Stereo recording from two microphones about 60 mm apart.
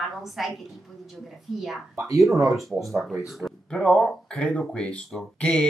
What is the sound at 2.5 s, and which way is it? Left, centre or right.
Speech, centre.